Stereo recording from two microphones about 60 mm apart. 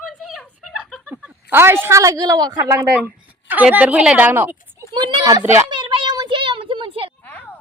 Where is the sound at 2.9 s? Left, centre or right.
Right.